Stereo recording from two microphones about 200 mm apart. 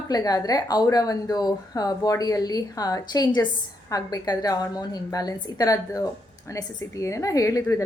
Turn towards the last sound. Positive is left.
turn(degrees=15)  # may be behind; listen again after turning